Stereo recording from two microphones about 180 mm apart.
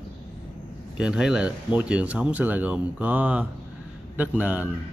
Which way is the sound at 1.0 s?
5° right (ahead or behind).